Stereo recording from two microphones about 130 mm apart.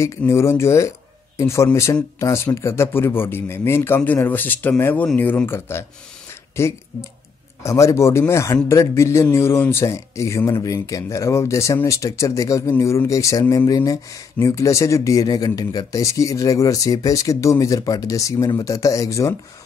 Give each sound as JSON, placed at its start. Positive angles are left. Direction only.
{"t": 0.3, "sound": "speech", "side_deg": 20}